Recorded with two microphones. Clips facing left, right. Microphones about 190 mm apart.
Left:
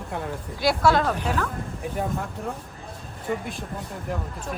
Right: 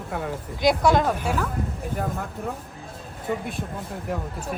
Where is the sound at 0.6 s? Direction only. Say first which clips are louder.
Right 1 dB; 15° right (ahead or behind).